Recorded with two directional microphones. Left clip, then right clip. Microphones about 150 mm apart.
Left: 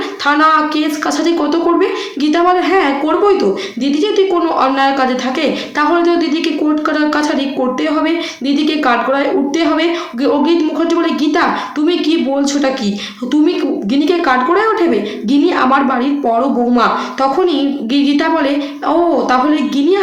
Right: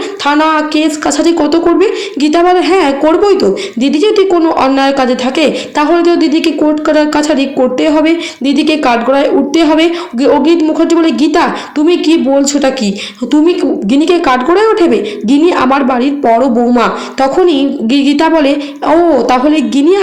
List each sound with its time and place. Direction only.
0.3 s a woman's voice: 35° right (ahead or behind)